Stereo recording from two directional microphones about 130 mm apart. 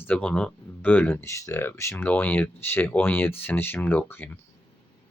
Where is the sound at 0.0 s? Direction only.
10° left (ahead or behind).